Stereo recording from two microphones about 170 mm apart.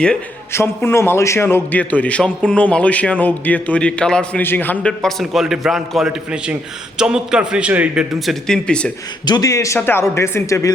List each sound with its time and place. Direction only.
0.0 s a man's voice: 10° left (ahead or behind)
9.2 s a man's voice: 20° left (ahead or behind)